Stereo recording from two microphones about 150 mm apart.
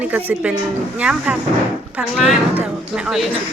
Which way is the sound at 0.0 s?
10° right (ahead or behind).